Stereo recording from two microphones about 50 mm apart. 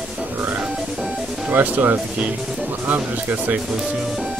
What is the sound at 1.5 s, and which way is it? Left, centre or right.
Speech, right.